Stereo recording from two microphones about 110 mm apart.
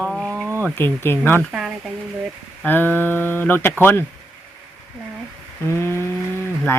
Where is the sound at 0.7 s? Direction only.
20° left (ahead or behind).